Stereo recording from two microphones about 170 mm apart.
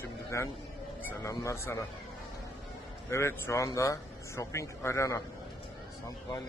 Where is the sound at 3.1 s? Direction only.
15° left (ahead or behind).